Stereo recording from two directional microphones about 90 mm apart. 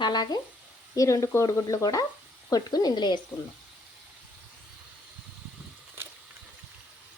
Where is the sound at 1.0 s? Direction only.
40° left (ahead or behind).